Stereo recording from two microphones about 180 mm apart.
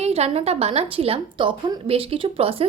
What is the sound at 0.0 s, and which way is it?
A woman's voice, 35° right (ahead or behind).